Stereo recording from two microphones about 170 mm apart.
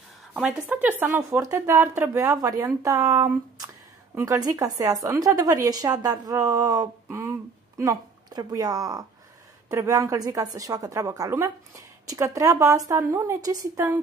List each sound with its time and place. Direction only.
0.3 s a woman's voice: 5° right (ahead or behind)